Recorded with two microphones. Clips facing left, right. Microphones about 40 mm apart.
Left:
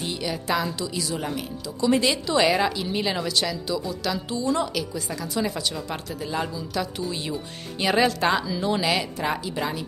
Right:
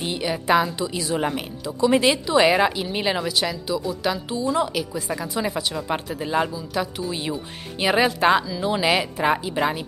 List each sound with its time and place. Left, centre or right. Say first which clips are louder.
0.0 s a woman's voice: right 3 dB; right
8.5 s a woman's voice: right 1 dB; centre
8.8 s a woman's voice: right 4 dB; right